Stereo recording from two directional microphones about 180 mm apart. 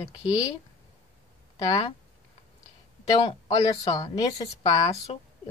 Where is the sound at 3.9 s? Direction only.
25° left (ahead or behind).